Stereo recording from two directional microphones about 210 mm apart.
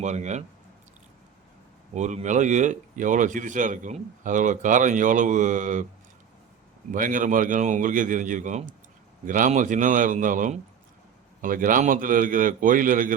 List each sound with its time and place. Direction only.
0.0 s speech: 35° right (ahead or behind)
2.0 s speech: 35° right (ahead or behind)
6.9 s speech: 40° right (ahead or behind)